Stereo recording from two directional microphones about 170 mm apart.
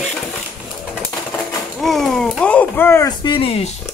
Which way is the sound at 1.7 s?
Centre (ahead or behind).